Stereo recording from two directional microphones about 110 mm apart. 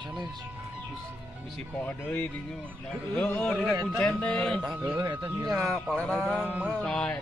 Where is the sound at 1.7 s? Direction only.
15° left (ahead or behind).